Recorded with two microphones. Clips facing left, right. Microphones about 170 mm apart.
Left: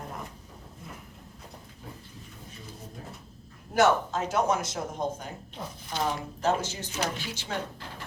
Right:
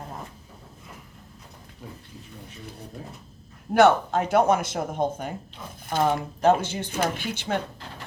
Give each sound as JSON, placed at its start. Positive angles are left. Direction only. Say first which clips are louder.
{"t": 3.8, "sound": "speech", "louder": "right 5 dB", "side_deg": -60}